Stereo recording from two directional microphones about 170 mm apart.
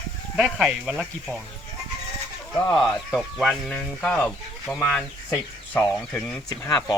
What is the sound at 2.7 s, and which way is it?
Speech, centre (ahead or behind).